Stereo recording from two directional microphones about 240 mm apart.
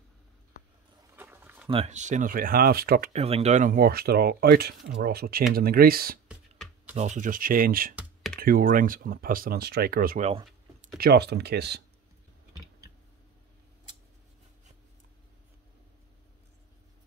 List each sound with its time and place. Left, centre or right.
1.1 s a sound: centre
1.7 s speech: right
7.9 s computer keyboard: centre
8.4 s speech: right
11.0 s speech: right